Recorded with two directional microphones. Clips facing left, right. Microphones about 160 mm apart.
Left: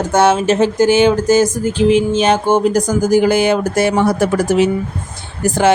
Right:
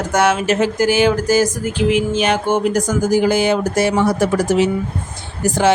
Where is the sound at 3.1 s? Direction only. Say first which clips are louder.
Left 3 dB; 55° left (ahead or behind).